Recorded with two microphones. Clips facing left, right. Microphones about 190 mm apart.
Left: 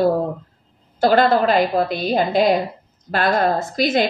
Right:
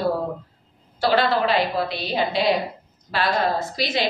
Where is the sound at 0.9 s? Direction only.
45° left (ahead or behind).